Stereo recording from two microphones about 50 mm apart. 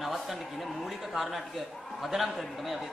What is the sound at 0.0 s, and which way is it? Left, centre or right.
A man's voice, centre.